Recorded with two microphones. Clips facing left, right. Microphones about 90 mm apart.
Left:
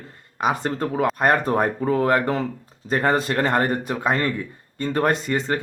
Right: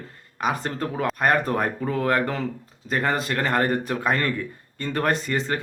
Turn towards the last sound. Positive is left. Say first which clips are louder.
# left 2 dB
turn(degrees=25)  # may be behind; listen again after turning